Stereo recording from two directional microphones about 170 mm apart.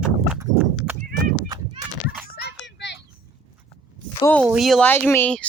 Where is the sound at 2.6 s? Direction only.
90° left.